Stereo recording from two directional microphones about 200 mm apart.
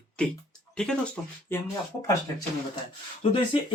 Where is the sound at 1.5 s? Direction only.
10° left (ahead or behind).